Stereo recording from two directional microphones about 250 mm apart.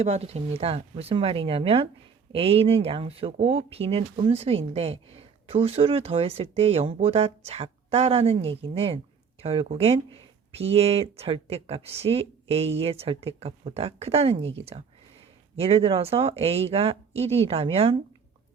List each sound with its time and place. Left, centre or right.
0.0 s speech: right